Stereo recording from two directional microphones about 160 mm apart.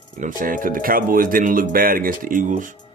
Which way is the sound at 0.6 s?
60° right (ahead or behind).